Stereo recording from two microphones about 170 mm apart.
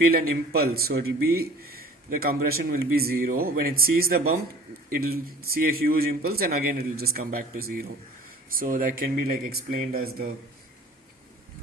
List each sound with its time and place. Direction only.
0.0 s speech: 65° right (ahead or behind)